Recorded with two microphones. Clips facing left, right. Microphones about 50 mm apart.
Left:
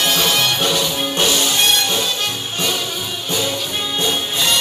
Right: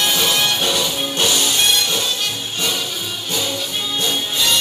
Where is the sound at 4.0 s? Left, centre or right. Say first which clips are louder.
Left 1 dB; centre.